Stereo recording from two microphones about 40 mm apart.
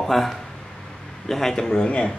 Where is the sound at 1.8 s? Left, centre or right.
Left.